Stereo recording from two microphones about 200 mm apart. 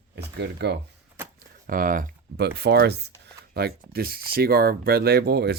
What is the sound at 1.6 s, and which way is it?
Speech, 45° right (ahead or behind).